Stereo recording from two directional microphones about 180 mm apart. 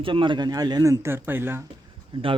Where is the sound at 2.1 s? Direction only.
30° right (ahead or behind).